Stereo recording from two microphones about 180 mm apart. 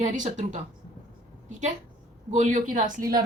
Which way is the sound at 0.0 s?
40° right (ahead or behind).